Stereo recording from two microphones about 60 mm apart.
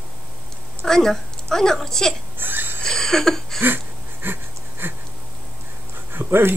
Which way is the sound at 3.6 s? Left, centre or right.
Right.